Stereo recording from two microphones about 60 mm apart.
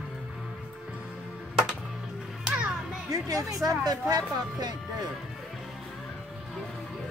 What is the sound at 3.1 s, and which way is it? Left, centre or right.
Music, right.